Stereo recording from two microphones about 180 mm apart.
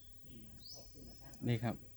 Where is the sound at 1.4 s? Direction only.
Centre (ahead or behind).